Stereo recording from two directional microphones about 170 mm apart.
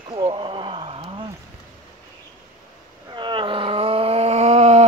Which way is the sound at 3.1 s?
30° right (ahead or behind).